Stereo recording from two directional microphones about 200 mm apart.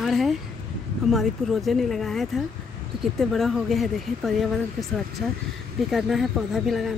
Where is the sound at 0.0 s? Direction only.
Centre (ahead or behind).